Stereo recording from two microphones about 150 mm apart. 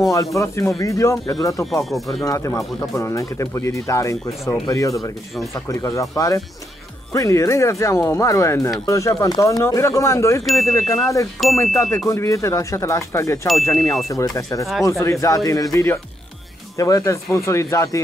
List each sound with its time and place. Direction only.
0.1 s speech: 20° left (ahead or behind)
1.7 s speech: centre (ahead or behind)
2.2 s speech: 20° left (ahead or behind)
10.4 s speech: centre (ahead or behind)
10.7 s speech: 20° left (ahead or behind)